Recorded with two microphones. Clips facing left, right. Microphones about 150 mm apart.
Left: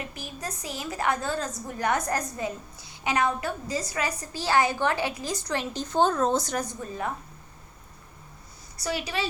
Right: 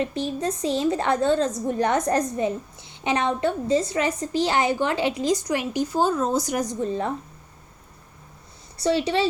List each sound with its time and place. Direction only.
0.0 s a woman's voice: 30° right (ahead or behind)
8.8 s a woman's voice: 30° right (ahead or behind)